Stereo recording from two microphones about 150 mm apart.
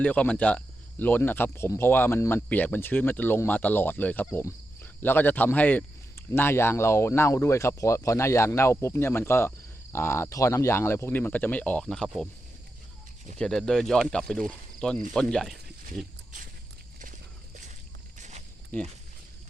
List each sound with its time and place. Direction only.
0.0 s speech: 10° left (ahead or behind)
13.4 s speech: 5° left (ahead or behind)
18.2 s a sound: 50° right (ahead or behind)
18.7 s speech: 10° left (ahead or behind)